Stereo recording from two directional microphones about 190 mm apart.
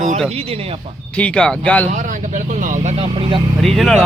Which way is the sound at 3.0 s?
25° right (ahead or behind).